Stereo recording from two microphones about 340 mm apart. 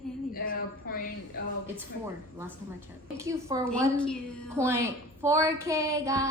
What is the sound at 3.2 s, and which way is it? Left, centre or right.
Speech, centre.